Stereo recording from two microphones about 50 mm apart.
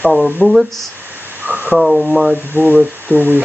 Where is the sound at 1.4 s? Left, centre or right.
Right.